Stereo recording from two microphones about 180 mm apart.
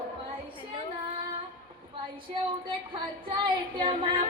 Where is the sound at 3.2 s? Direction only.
25° right (ahead or behind).